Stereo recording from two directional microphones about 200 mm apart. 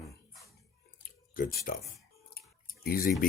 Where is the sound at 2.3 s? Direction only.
50° left (ahead or behind).